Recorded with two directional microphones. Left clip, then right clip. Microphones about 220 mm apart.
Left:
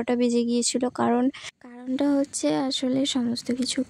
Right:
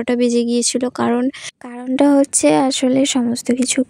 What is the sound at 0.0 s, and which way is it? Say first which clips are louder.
Speech: right 7 dB; 30° right (ahead or behind).